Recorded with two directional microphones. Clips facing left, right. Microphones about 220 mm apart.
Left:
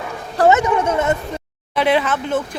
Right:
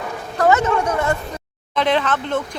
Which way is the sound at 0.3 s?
30° left (ahead or behind).